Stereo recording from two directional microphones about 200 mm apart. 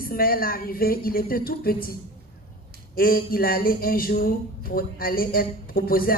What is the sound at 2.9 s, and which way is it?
Speech, 45° left (ahead or behind).